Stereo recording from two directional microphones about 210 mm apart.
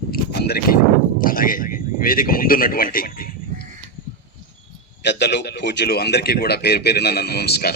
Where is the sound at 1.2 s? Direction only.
40° left (ahead or behind).